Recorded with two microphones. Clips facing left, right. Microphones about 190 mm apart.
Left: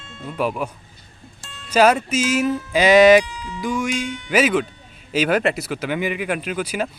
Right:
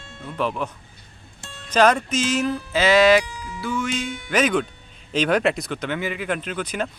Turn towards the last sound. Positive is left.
turn(degrees=10)  # may be behind; listen again after turning